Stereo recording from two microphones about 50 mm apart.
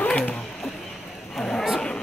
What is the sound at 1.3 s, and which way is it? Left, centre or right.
Speech, centre.